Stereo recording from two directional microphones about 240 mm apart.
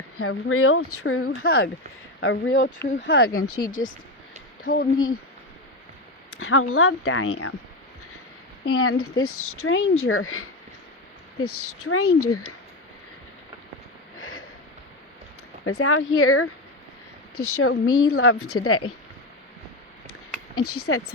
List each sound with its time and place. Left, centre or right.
0.2 s speech: left
4.6 s speech: left
6.3 s speech: left
8.7 s speech: left
14.2 s a sound: left
15.8 s speech: left
20.6 s speech: left